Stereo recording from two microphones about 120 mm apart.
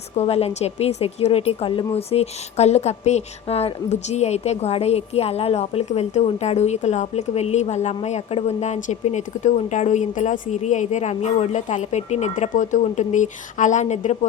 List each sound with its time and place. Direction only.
0.2 s a woman's voice: 55° left (ahead or behind); by 14.2 s 75° left (ahead or behind)